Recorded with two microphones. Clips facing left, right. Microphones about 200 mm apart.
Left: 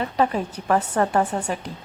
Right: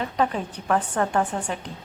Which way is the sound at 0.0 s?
5° left (ahead or behind).